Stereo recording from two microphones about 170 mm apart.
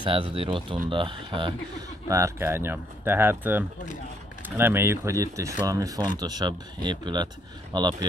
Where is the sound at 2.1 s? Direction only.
15° right (ahead or behind).